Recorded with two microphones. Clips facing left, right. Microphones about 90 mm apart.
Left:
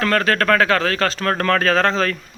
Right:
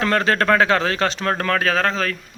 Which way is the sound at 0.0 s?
20° right (ahead or behind).